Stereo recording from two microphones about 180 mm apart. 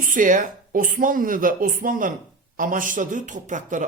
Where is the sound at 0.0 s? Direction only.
50° right (ahead or behind).